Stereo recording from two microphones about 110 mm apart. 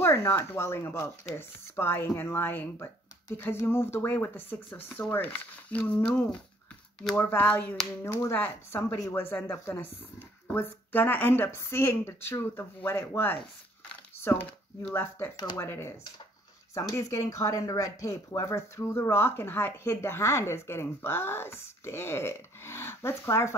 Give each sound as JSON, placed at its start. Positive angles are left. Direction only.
{"t": 0.0, "sound": "speech", "side_deg": 20}
{"t": 8.9, "sound": "speech", "side_deg": 35}
{"t": 9.2, "sound": "speech", "side_deg": 25}